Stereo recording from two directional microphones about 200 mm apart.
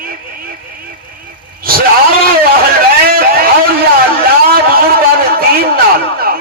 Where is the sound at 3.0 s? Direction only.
50° right (ahead or behind).